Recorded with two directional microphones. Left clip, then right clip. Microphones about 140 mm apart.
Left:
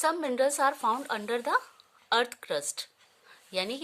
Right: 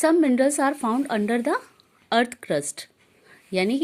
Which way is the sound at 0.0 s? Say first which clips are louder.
Right 7 dB; 15° right (ahead or behind).